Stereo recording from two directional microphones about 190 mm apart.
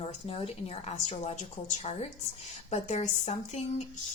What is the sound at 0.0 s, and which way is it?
A woman's voice, 30° left (ahead or behind).